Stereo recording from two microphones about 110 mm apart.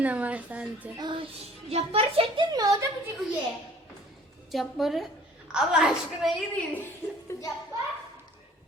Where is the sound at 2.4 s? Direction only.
40° right (ahead or behind).